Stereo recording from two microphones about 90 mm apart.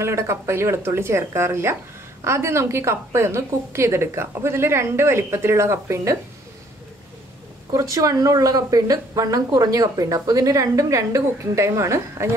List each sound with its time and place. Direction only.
0.0 s a woman's voice: 30° right (ahead or behind)
7.7 s a woman's voice: 35° right (ahead or behind)